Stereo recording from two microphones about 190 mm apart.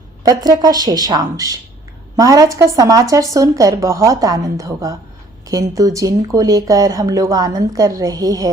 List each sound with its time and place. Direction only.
0.2 s a woman's voice: 20° right (ahead or behind)